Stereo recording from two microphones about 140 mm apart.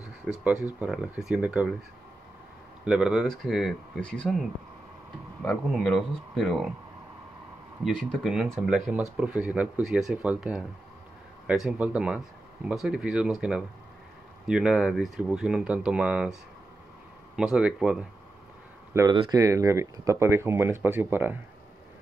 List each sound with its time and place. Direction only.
0.3 s speech: 10° right (ahead or behind)
2.8 s speech: 5° right (ahead or behind)
5.7 s speech: centre (ahead or behind)
7.8 s speech: 5° left (ahead or behind)
17.4 s speech: 5° right (ahead or behind)
18.9 s speech: 20° right (ahead or behind)